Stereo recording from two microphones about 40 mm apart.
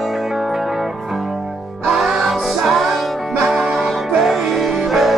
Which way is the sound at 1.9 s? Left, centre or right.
Centre.